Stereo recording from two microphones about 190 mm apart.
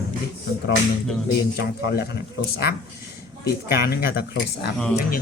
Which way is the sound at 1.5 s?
55° left (ahead or behind).